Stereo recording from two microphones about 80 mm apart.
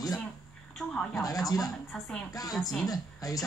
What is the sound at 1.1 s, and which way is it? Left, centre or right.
Speech, left.